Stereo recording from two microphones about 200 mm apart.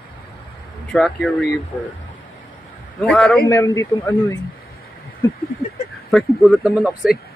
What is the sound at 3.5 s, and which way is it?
Speech, 15° left (ahead or behind).